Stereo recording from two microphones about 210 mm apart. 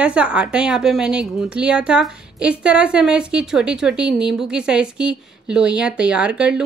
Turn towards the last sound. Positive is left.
turn(degrees=-5)  # may be behind; listen again after turning